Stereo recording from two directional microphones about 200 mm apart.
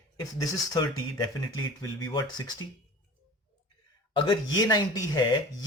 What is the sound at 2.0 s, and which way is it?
Speech, 20° left (ahead or behind).